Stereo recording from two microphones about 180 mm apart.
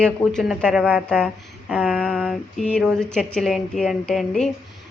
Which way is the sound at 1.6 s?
5° right (ahead or behind).